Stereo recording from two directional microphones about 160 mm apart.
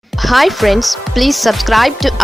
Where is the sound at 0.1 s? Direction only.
Centre (ahead or behind).